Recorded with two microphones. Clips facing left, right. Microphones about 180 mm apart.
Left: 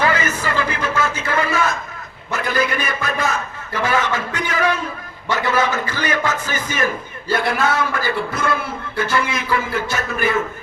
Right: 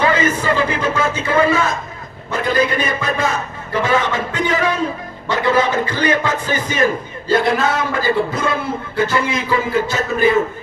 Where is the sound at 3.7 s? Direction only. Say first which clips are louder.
Right 3 dB; 25° right (ahead or behind).